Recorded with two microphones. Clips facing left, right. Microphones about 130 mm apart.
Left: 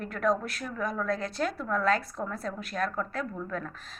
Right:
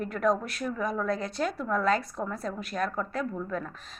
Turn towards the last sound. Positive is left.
turn(degrees=0)  # may be behind; listen again after turning